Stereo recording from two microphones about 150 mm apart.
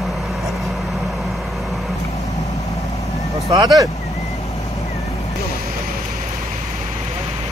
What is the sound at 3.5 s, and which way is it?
Speech, 25° right (ahead or behind).